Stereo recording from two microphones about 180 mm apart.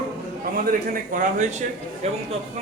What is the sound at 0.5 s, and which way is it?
A man's voice, 50° right (ahead or behind).